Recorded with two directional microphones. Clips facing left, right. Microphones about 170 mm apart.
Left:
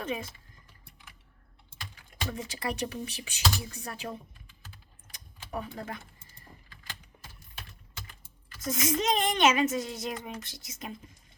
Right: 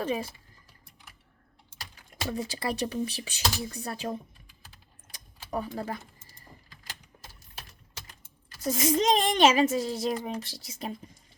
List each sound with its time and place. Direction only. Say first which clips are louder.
0.0 s speech: right 4 dB; 35° right (ahead or behind)
2.3 s speech: right 4 dB; 35° right (ahead or behind)
5.5 s speech: right 4 dB; 35° right (ahead or behind)
8.0 s speech: left 1 dB; 35° right (ahead or behind)